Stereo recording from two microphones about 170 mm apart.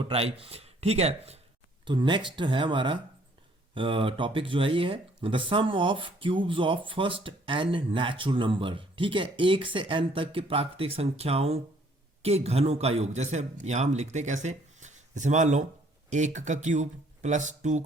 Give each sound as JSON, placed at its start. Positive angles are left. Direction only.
{"t": 0.0, "sound": "speech", "side_deg": -35}
{"t": 1.8, "sound": "speech", "side_deg": -25}